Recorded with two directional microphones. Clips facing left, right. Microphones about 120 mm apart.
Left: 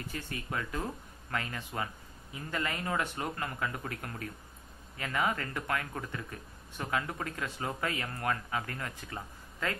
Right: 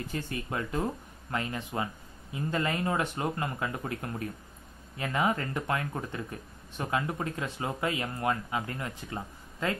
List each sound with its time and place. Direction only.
0.1 s speech: 30° right (ahead or behind)